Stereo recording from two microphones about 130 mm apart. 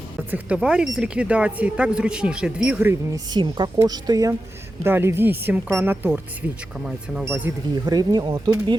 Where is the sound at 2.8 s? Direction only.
20° right (ahead or behind).